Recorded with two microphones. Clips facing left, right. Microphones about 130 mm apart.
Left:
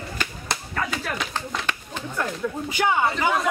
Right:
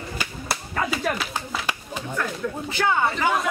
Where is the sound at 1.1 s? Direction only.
5° right (ahead or behind).